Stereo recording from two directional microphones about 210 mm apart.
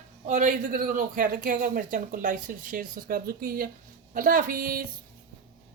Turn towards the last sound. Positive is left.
turn(degrees=-45)  # may be behind; listen again after turning